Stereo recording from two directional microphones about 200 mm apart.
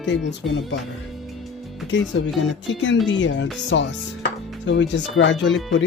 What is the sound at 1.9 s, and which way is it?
Speech, 70° left (ahead or behind).